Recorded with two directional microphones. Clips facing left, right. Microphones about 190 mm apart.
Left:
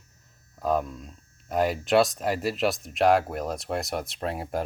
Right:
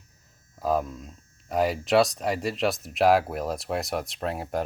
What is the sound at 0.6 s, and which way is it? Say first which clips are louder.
Speech: even; centre (ahead or behind).